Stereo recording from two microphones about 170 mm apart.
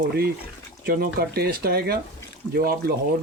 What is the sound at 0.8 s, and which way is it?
Speech, 60° right (ahead or behind).